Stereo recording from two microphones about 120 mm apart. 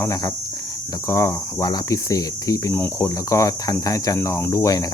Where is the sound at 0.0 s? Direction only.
25° left (ahead or behind).